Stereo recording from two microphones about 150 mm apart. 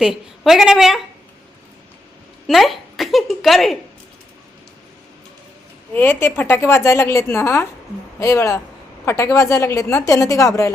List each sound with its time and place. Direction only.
0.0 s speech: centre (ahead or behind)
2.5 s speech: centre (ahead or behind)
5.9 s a woman's voice: 15° left (ahead or behind)